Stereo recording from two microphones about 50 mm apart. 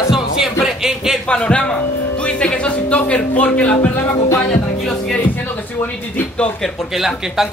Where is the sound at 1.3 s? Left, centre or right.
Centre.